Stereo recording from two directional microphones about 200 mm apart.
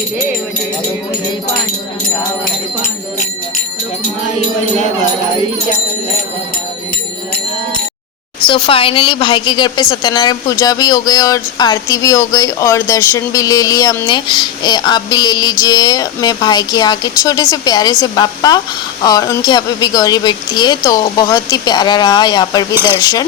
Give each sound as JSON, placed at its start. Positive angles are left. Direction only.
{"t": 8.4, "sound": "a woman's voice", "side_deg": 25}
{"t": 22.7, "sound": "speech", "side_deg": -10}
{"t": 23.0, "sound": "speech", "side_deg": 15}